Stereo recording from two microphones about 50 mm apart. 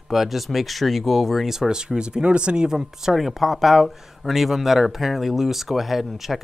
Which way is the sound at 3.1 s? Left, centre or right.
Centre.